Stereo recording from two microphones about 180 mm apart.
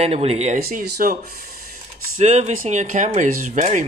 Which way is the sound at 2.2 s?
40° right (ahead or behind).